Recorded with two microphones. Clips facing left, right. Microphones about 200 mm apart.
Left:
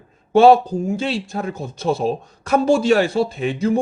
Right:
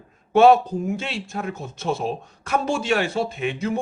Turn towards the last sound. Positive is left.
turn(degrees=35)  # may be behind; listen again after turning